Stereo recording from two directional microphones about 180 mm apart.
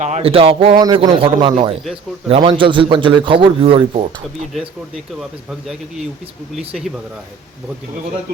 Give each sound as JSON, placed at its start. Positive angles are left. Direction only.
{"t": 0.0, "sound": "speech", "side_deg": -35}
{"t": 0.8, "sound": "a man's voice", "side_deg": -20}